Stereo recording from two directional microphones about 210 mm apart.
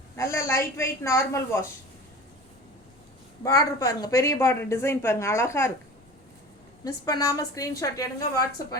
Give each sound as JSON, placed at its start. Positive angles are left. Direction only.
{"t": 0.2, "sound": "speech", "side_deg": 15}
{"t": 3.4, "sound": "speech", "side_deg": 15}
{"t": 6.8, "sound": "speech", "side_deg": 15}